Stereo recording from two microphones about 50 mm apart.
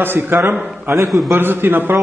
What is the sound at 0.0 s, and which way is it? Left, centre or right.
Speech, right.